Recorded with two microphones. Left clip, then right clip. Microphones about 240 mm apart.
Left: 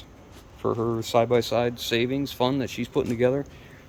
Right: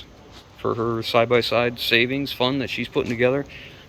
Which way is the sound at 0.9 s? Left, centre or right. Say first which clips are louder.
Right 4 dB; centre.